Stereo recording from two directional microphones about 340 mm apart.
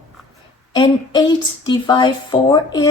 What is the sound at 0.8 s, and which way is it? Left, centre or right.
Speech, centre.